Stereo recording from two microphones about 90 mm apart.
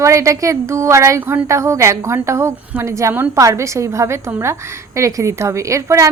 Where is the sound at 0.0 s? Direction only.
35° right (ahead or behind).